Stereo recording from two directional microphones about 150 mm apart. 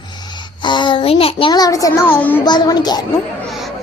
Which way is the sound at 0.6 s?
30° left (ahead or behind).